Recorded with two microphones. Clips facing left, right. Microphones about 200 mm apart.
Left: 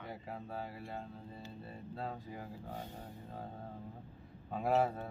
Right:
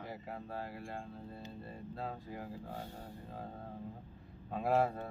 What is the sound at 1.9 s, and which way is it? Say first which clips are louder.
Speech: even; centre (ahead or behind).